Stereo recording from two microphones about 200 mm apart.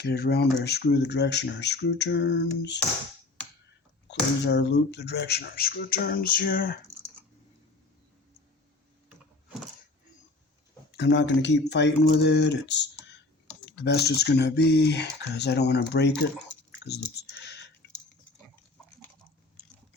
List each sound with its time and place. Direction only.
0.0 s speech: 55° left (ahead or behind)
4.1 s speech: 60° left (ahead or behind)
10.9 s speech: 60° left (ahead or behind)
16.8 s clicking: 55° left (ahead or behind)